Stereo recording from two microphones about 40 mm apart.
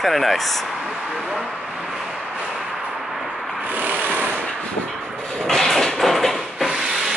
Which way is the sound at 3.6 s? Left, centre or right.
Right.